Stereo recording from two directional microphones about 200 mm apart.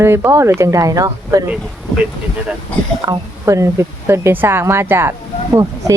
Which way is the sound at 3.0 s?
15° right (ahead or behind).